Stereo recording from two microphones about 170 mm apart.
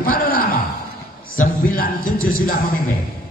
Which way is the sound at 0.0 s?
55° left (ahead or behind).